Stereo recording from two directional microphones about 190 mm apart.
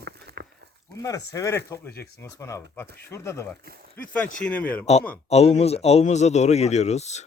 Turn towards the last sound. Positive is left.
turn(degrees=35)  # may be behind; listen again after turning